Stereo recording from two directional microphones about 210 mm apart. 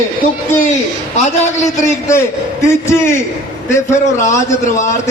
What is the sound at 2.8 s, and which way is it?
Speech, 15° left (ahead or behind).